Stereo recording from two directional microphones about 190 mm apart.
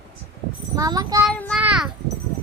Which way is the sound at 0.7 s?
20° right (ahead or behind).